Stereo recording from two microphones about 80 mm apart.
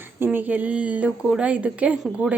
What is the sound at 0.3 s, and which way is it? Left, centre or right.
Speech, right.